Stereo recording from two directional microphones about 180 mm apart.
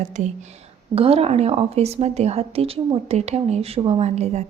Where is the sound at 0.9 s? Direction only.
35° right (ahead or behind).